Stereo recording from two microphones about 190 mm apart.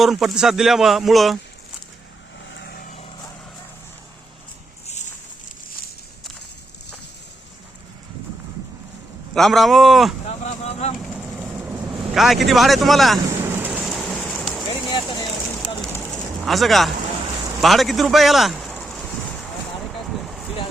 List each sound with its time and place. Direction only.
0.0 s speech: centre (ahead or behind)
2.5 s vehicle: 60° left (ahead or behind)
9.3 s speech: centre (ahead or behind)
10.2 s vehicle: 35° left (ahead or behind)
11.0 s vehicle: centre (ahead or behind)
12.1 s speech: centre (ahead or behind)
13.4 s rain: 10° right (ahead or behind)
14.8 s vehicle: 25° left (ahead or behind)
16.1 s a sound: centre (ahead or behind)
20.2 s vehicle: centre (ahead or behind)